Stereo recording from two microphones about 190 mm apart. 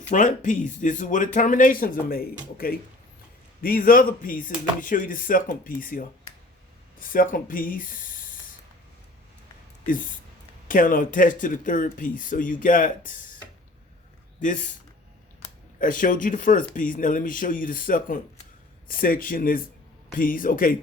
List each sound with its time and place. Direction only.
0.1 s speech: 40° left (ahead or behind)
7.1 s speech: 45° left (ahead or behind)
10.7 s speech: 45° left (ahead or behind)
14.3 s speech: 40° left (ahead or behind)
15.8 s speech: 45° left (ahead or behind)